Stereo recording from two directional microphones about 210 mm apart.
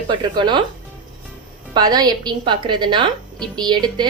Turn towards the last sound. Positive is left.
turn(degrees=-20)  # may be behind; listen again after turning